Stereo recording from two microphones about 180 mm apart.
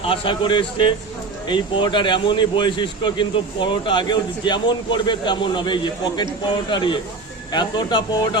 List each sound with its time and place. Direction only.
0.0 s speech: 30° left (ahead or behind)